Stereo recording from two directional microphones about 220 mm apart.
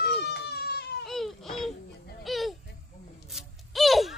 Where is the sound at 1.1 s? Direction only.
Centre (ahead or behind).